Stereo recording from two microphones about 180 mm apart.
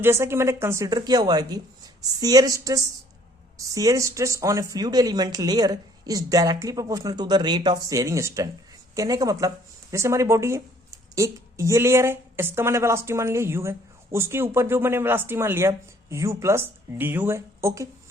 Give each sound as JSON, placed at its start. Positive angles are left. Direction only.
{"t": 0.0, "sound": "a woman's voice", "side_deg": -15}